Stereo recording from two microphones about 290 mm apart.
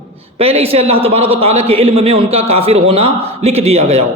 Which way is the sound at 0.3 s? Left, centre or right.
Centre.